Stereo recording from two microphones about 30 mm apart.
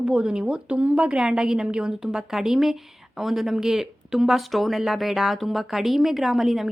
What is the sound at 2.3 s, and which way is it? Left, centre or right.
A woman's voice, centre.